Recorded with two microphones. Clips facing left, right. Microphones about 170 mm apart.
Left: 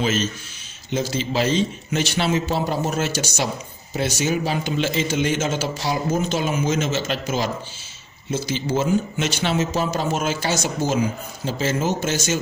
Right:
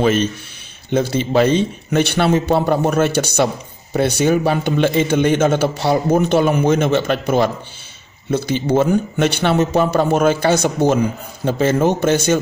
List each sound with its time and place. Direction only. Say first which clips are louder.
0.0 s a man's voice: right 7 dB; 60° right (ahead or behind)